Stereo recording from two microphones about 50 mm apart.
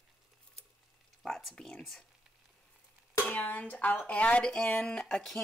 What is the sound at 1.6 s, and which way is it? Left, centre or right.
Speech, centre.